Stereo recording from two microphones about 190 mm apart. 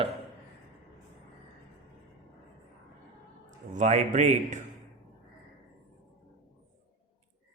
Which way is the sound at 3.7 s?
35° right (ahead or behind).